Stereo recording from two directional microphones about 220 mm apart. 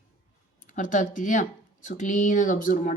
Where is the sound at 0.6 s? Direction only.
35° left (ahead or behind).